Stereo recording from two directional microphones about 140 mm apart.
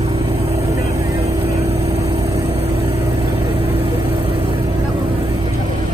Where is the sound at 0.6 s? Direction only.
20° right (ahead or behind).